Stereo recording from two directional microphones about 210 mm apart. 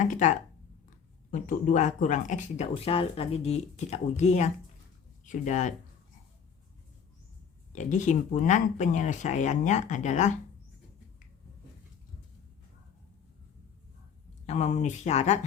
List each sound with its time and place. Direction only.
0.0 s speech: 35° left (ahead or behind)
7.7 s speech: 35° left (ahead or behind)
14.4 s speech: 35° left (ahead or behind)